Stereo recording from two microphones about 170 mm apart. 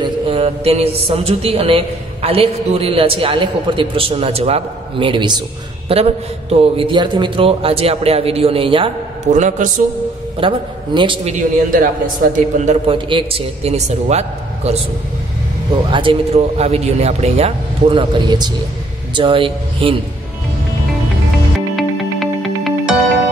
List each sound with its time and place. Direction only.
0.0 s a man's voice: 35° right (ahead or behind)
9.3 s a man's voice: 45° right (ahead or behind)
10.4 s speech: 30° right (ahead or behind)
11.3 s a man's voice: 50° right (ahead or behind)
12.9 s speech: 30° right (ahead or behind)
15.9 s speech: 30° right (ahead or behind)
21.5 s music: centre (ahead or behind)